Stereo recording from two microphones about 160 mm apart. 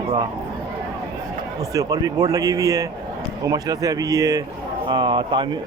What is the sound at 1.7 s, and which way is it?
Speech, 20° right (ahead or behind).